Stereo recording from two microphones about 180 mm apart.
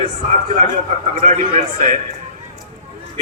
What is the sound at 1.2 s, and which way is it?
Speech, 45° right (ahead or behind).